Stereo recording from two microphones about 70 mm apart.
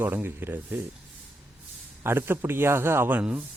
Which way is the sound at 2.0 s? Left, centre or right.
Right.